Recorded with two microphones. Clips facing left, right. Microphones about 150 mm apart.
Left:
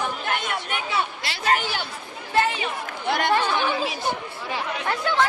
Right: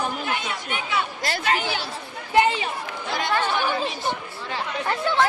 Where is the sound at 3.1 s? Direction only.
60° left (ahead or behind).